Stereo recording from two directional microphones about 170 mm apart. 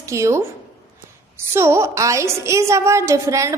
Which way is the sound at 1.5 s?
15° right (ahead or behind).